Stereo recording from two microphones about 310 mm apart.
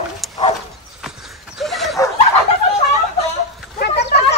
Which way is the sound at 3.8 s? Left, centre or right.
Left.